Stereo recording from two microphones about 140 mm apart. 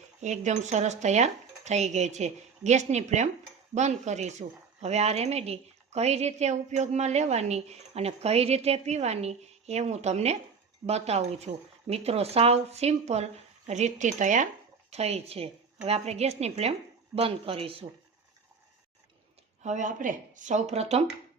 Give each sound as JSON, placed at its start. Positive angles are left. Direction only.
{"t": 0.2, "sound": "a woman's voice", "side_deg": -55}
{"t": 14.8, "sound": "a woman's voice", "side_deg": -50}
{"t": 19.6, "sound": "speech", "side_deg": -60}